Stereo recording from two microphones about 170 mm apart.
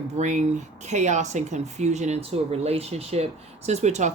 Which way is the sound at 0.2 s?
45° right (ahead or behind).